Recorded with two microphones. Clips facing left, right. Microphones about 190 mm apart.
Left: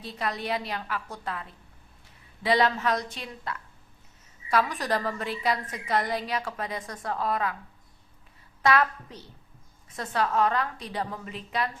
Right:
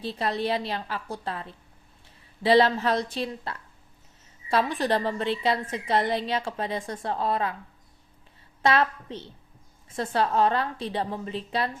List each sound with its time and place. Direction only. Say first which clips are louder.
0.0 s a woman's voice: right 5 dB; 30° right (ahead or behind)
8.6 s a woman's voice: right 1 dB; 25° right (ahead or behind)